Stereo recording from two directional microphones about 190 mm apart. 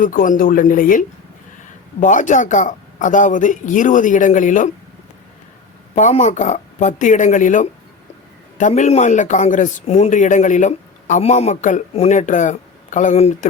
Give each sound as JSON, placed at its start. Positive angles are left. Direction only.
{"t": 0.0, "sound": "speech", "side_deg": 45}
{"t": 5.9, "sound": "a man's voice", "side_deg": 40}